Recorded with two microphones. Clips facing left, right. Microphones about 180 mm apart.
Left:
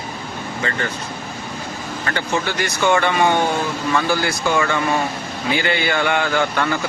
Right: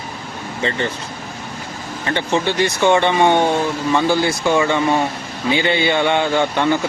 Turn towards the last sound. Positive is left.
turn(degrees=-20)  # may be behind; listen again after turning